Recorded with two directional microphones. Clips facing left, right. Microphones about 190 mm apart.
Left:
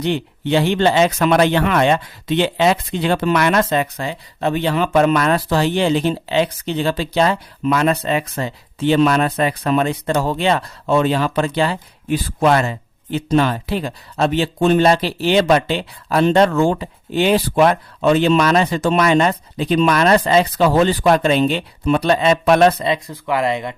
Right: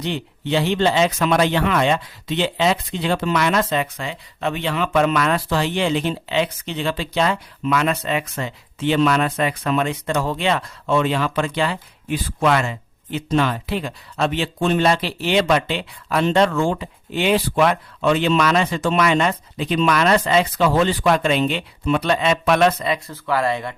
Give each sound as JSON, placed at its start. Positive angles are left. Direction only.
{"t": 0.0, "sound": "speech", "side_deg": 55}
{"t": 22.9, "sound": "speech", "side_deg": 15}